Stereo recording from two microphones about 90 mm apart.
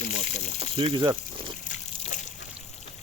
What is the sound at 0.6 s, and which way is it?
Speech, 85° right.